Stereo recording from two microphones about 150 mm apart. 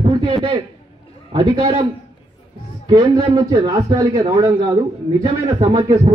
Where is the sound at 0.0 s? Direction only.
35° right (ahead or behind).